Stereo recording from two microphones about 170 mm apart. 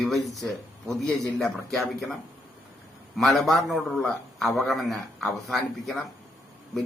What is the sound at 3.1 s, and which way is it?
A man's voice, centre (ahead or behind).